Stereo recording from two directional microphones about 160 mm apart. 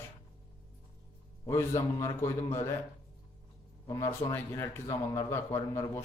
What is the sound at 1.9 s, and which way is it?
Speech, 20° left (ahead or behind).